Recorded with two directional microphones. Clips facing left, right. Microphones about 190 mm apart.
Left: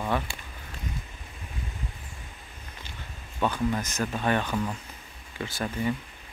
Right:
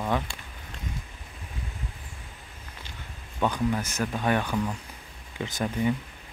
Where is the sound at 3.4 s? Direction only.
10° right (ahead or behind).